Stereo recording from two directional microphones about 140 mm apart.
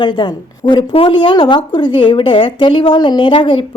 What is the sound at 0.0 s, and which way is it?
A woman's voice, 30° left (ahead or behind).